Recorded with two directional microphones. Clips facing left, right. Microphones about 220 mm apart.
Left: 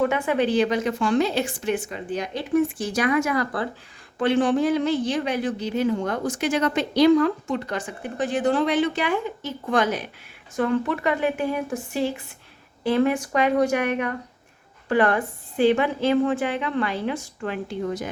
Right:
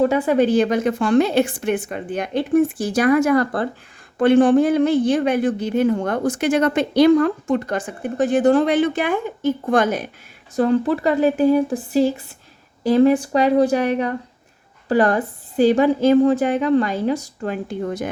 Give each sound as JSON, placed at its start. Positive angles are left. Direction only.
{"t": 0.0, "sound": "a woman's voice", "side_deg": -35}
{"t": 10.5, "sound": "a woman's voice", "side_deg": -35}